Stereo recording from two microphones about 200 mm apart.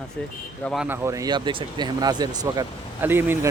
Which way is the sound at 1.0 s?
20° right (ahead or behind).